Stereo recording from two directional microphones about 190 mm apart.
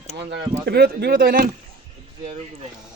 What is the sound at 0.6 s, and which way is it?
Speech, 60° right (ahead or behind).